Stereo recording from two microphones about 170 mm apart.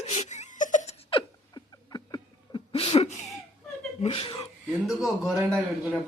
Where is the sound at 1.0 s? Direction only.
25° left (ahead or behind).